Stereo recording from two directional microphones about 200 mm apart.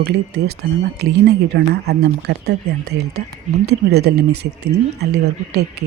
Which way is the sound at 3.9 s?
55° right (ahead or behind).